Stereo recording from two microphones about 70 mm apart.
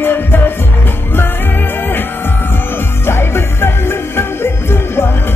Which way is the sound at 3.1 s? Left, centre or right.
Left.